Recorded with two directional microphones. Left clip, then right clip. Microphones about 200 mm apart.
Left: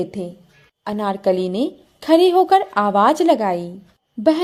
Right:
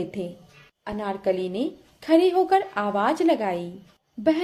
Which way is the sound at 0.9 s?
40° left (ahead or behind).